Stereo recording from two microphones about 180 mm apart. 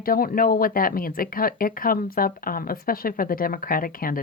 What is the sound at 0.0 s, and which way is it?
Speech, 55° left (ahead or behind).